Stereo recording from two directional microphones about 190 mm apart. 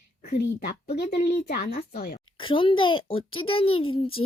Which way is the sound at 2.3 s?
25° left (ahead or behind).